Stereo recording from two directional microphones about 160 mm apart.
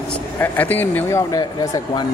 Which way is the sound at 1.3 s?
25° left (ahead or behind).